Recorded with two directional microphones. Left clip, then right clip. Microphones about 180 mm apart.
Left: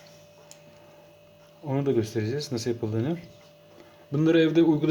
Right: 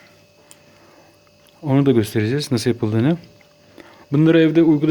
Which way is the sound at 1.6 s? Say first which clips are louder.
Right 9 dB; 55° right (ahead or behind).